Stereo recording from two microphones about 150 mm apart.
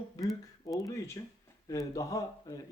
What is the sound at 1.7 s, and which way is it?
Speech, 25° left (ahead or behind).